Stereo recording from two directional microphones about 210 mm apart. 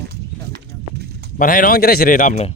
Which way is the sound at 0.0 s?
50° right (ahead or behind).